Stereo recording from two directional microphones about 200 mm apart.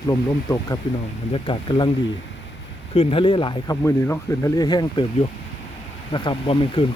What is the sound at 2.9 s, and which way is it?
Speech, 30° left (ahead or behind).